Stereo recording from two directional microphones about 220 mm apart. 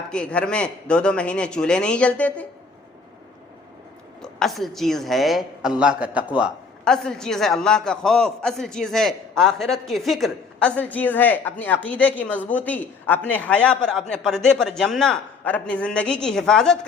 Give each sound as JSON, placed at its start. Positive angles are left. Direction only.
{"t": 0.1, "sound": "a woman's voice", "side_deg": 5}
{"t": 4.2, "sound": "a woman's voice", "side_deg": 0}